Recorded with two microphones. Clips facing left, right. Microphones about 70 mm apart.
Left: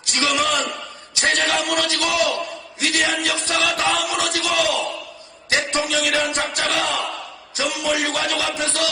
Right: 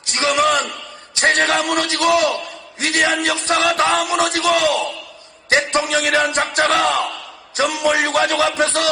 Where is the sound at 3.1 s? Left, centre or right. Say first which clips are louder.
Right 4 dB; right.